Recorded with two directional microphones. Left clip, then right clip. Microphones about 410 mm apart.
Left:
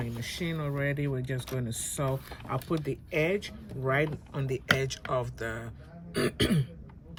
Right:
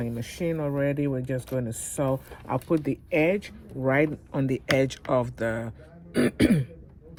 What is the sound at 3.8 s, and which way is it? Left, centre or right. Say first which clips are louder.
Speech: right 5 dB; centre.